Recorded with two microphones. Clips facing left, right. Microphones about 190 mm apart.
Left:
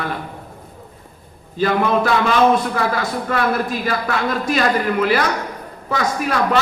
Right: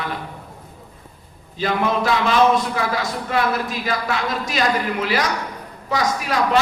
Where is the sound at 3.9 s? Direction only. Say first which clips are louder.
Even; 50° left (ahead or behind).